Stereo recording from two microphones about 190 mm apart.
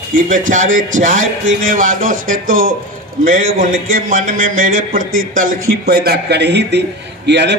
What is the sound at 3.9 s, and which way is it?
A man's voice, 45° right (ahead or behind).